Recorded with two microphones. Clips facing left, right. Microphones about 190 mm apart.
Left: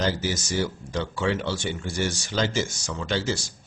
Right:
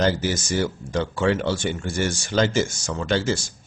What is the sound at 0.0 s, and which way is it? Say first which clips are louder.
Speech: right 4 dB; 55° right (ahead or behind).